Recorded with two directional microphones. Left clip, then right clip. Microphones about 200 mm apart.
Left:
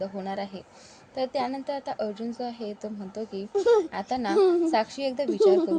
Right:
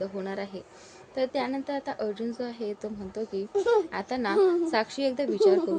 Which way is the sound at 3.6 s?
10° left (ahead or behind).